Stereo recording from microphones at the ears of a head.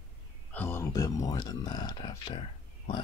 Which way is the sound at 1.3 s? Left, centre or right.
Left.